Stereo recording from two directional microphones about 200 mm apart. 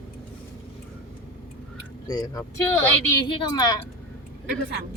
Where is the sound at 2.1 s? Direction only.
20° left (ahead or behind).